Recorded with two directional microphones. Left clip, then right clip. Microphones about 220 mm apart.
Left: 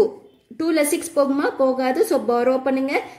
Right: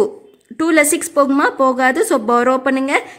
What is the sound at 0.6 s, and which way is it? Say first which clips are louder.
Speech: right 6 dB; 35° right (ahead or behind).